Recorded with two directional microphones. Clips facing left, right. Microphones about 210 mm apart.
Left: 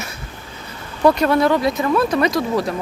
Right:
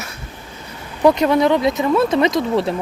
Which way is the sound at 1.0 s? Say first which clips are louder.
Right 1 dB; 15° right (ahead or behind).